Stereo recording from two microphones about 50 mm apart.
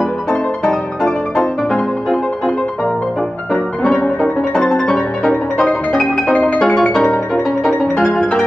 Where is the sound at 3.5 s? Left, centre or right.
Centre.